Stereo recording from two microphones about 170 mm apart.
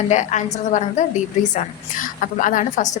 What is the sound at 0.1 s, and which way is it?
A woman's voice, 45° left (ahead or behind).